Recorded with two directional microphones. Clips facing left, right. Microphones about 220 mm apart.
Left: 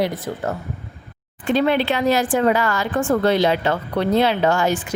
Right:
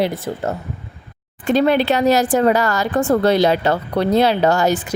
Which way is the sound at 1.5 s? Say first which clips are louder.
Right 3 dB; 40° right (ahead or behind).